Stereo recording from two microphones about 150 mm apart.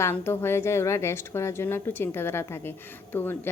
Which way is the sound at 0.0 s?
15° left (ahead or behind).